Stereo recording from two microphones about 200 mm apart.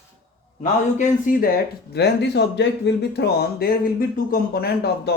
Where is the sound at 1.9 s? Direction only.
55° left (ahead or behind).